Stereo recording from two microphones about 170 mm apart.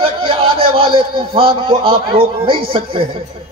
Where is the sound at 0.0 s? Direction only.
35° right (ahead or behind).